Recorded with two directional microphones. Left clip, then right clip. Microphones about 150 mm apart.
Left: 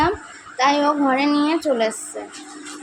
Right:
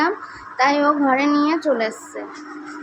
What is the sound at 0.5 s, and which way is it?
A woman's voice, 20° left (ahead or behind).